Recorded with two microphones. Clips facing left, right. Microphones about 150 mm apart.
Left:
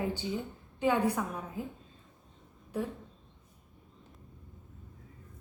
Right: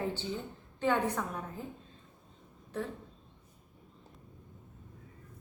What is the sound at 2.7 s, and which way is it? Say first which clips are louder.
Speech: left 3 dB; 10° left (ahead or behind).